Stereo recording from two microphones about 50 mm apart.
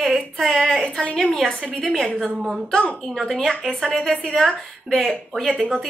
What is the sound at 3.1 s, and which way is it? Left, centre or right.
A woman's voice, centre.